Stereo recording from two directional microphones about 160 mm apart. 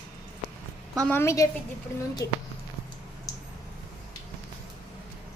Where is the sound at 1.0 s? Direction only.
15° left (ahead or behind).